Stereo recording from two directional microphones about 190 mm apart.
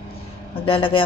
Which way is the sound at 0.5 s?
30° left (ahead or behind).